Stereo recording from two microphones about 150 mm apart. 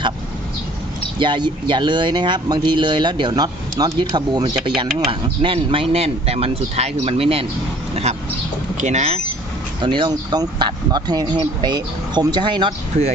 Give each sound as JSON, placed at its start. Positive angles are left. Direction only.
{"t": 1.2, "sound": "speech", "side_deg": -30}
{"t": 9.8, "sound": "speech", "side_deg": -30}